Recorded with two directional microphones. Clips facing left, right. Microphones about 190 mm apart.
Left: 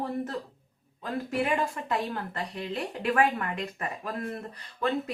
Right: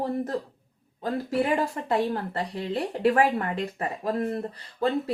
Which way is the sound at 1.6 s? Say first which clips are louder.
Right 4 dB; 35° right (ahead or behind).